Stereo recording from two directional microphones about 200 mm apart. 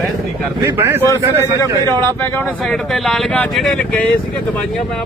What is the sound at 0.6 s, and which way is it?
A man's voice, 10° right (ahead or behind).